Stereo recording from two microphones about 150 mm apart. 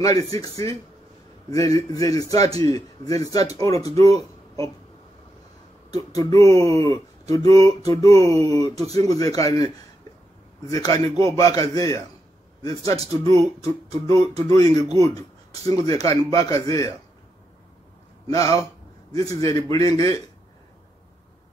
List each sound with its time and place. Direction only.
0.0 s speech: 25° left (ahead or behind)
5.9 s speech: 20° left (ahead or behind)
8.1 s speech: 45° right (ahead or behind)
8.5 s speech: 25° left (ahead or behind)
10.7 s speech: 25° left (ahead or behind)
13.6 s speech: 45° right (ahead or behind)
14.1 s speech: 25° left (ahead or behind)
18.3 s speech: 20° left (ahead or behind)